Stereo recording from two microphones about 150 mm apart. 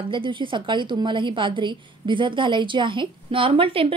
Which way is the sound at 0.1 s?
35° right (ahead or behind).